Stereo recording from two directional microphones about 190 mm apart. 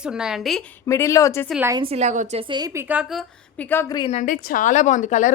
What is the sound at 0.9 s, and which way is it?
Speech, 15° left (ahead or behind).